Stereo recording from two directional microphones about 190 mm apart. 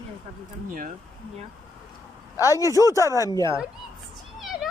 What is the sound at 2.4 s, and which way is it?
Speech, 15° left (ahead or behind).